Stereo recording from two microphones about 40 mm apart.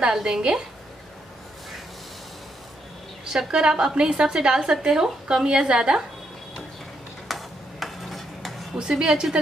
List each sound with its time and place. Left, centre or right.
0.0 s a woman's voice: centre
3.3 s a woman's voice: centre
7.2 s tick-tock: centre
8.7 s a woman's voice: right